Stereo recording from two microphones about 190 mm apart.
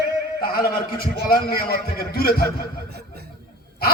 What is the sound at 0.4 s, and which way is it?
A man's voice, 55° left (ahead or behind).